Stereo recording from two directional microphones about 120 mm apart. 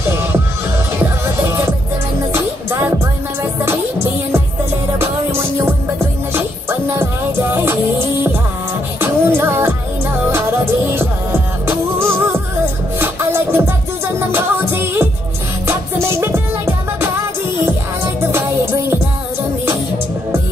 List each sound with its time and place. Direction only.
7.5 s music: 20° right (ahead or behind)